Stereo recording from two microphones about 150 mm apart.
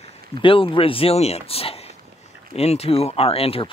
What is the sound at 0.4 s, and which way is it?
Speech, 35° left (ahead or behind).